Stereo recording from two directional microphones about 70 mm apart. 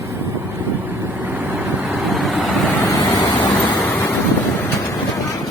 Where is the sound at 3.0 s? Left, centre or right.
Left.